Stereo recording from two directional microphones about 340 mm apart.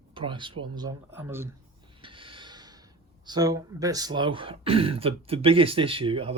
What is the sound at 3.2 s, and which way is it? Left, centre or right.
Speech, centre.